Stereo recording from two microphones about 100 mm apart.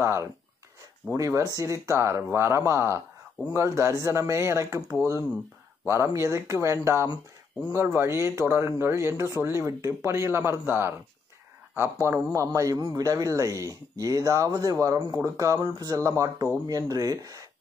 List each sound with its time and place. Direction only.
0.0 s a man's voice: 25° right (ahead or behind)
12.1 s a man's voice: 30° right (ahead or behind)